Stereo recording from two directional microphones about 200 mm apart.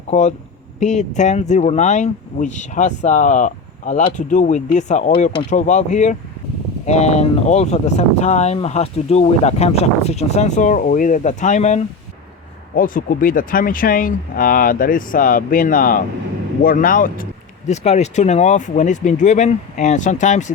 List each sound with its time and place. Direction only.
0.1 s speech: 35° left (ahead or behind)